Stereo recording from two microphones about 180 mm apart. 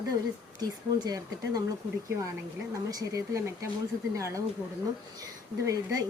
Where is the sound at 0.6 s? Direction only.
20° right (ahead or behind).